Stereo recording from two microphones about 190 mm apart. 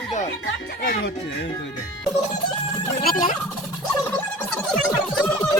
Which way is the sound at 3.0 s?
45° left (ahead or behind).